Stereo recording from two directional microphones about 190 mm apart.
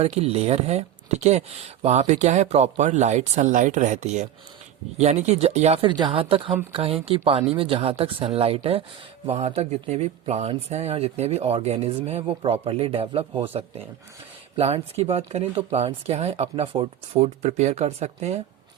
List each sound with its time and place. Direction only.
0.0 s speech: 35° right (ahead or behind)